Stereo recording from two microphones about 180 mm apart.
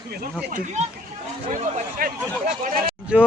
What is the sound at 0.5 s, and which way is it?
Speech, 40° right (ahead or behind).